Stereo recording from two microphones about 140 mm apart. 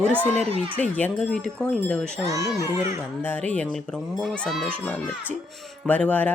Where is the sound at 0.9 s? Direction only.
10° left (ahead or behind).